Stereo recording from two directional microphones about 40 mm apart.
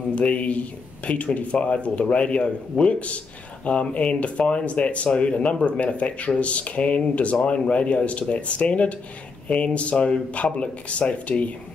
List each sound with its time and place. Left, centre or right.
0.1 s speech: left